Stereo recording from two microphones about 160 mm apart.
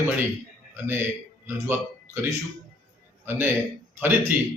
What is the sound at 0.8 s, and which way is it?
A man's voice, 15° right (ahead or behind).